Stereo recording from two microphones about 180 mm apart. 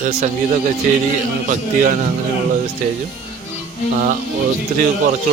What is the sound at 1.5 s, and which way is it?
Speech, 45° right (ahead or behind).